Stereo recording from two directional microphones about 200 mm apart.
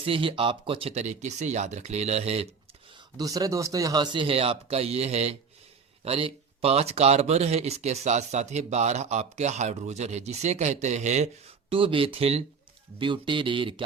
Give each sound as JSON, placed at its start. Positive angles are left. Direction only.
{"t": 0.0, "sound": "speech", "side_deg": -25}
{"t": 3.2, "sound": "speech", "side_deg": -15}